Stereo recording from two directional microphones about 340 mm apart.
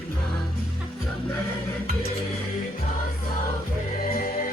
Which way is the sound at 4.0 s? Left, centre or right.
Left.